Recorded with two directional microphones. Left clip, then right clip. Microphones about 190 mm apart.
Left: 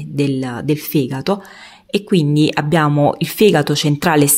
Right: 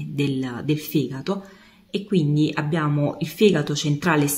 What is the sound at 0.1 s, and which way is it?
A woman's voice, 30° left (ahead or behind).